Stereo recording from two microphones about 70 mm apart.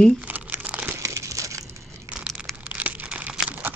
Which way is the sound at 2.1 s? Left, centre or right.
Centre.